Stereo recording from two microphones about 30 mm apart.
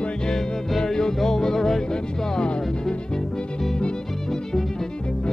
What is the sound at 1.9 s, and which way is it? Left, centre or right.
Music, left.